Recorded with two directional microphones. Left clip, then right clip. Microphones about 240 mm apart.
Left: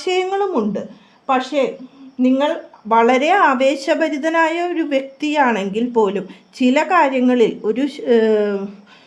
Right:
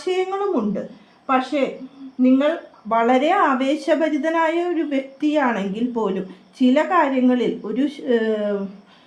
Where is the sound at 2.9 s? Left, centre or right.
Left.